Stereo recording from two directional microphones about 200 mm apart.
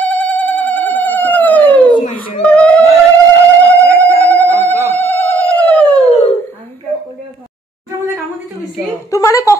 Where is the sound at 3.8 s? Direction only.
50° left (ahead or behind).